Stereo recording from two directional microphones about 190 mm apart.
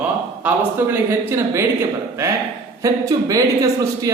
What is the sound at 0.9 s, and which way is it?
Speech, 10° right (ahead or behind).